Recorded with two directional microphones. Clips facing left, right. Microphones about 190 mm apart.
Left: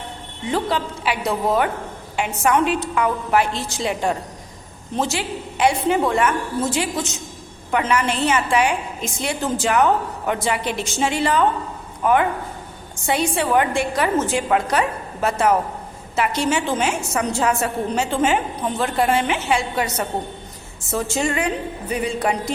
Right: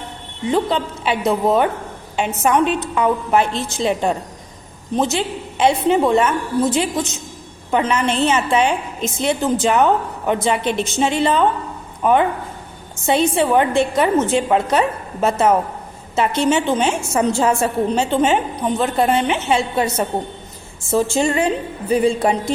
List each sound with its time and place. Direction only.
0.5 s a woman's voice: 25° right (ahead or behind)